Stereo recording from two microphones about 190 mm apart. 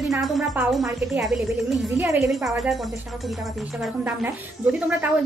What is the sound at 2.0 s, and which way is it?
Speech, 15° right (ahead or behind).